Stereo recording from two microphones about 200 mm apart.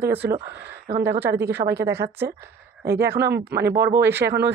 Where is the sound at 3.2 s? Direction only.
55° right (ahead or behind).